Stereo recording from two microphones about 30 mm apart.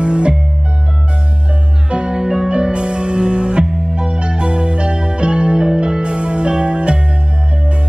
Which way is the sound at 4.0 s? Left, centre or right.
Right.